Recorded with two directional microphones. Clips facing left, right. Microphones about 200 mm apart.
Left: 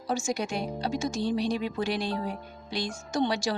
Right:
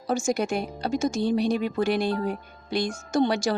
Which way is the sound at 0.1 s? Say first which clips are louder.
Right 5 dB; 50° right (ahead or behind).